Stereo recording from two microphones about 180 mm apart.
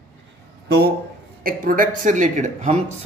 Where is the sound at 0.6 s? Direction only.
65° right (ahead or behind).